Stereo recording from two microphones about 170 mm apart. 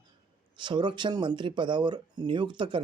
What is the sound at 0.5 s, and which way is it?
Speech, 25° right (ahead or behind).